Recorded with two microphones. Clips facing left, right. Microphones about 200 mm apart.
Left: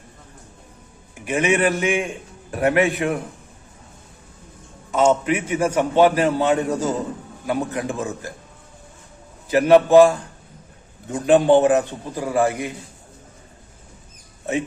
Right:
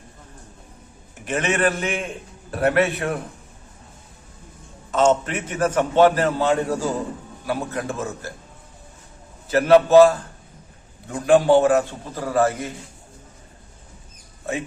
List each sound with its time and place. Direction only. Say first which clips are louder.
1.1 s a man's voice: left 4 dB; 10° left (ahead or behind)
4.9 s a man's voice: left 1 dB; 10° left (ahead or behind)
9.5 s a man's voice: left 1 dB; 15° left (ahead or behind)
14.5 s speech: left 4 dB; 20° left (ahead or behind)